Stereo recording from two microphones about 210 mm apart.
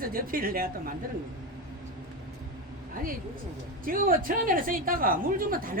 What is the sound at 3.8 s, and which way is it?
Speech, 40° right (ahead or behind).